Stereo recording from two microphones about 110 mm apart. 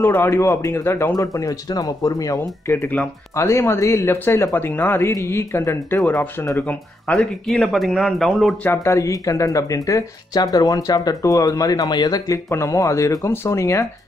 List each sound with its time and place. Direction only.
0.0 s speech: 25° left (ahead or behind)
1.1 s speech: 30° left (ahead or behind)
2.7 s speech: 15° left (ahead or behind)
5.9 s speech: 10° left (ahead or behind)
8.6 s speech: 25° left (ahead or behind)
12.4 s speech: 25° left (ahead or behind)